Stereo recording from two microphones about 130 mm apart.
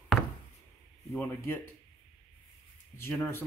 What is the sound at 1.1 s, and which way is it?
Speech, 20° left (ahead or behind).